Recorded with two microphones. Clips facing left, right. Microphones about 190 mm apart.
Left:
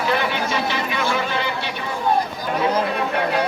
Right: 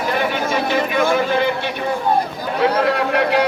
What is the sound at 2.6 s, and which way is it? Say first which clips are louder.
Speech: right 4 dB; 70° right (ahead or behind).